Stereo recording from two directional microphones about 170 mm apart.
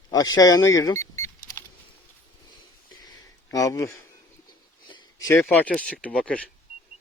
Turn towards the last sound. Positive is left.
turn(degrees=5)  # may be behind; listen again after turning